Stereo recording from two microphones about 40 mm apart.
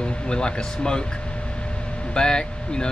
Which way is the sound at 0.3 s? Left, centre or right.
Left.